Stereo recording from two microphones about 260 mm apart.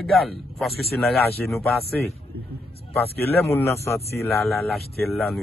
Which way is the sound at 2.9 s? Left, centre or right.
Centre.